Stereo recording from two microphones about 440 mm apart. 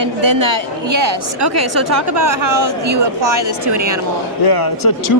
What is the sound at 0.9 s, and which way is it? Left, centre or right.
A woman's voice, right.